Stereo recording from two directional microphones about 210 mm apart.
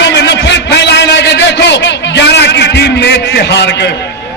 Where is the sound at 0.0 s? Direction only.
55° left (ahead or behind).